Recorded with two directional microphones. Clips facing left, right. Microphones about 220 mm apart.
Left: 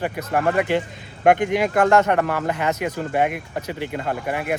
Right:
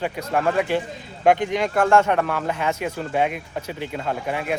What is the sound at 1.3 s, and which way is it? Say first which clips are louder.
Speech: left 1 dB; 55° left (ahead or behind).